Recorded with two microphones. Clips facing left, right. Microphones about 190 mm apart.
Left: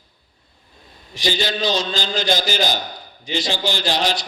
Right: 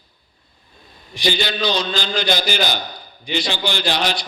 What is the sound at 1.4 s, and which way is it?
A man's voice, 45° left (ahead or behind).